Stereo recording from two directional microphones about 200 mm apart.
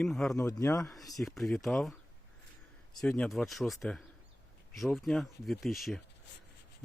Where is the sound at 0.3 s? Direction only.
15° left (ahead or behind).